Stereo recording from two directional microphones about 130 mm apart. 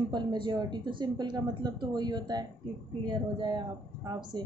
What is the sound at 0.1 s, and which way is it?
A woman's voice, 35° right (ahead or behind).